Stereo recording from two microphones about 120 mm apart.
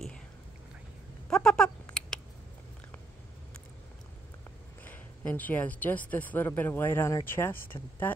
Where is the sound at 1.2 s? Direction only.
5° left (ahead or behind).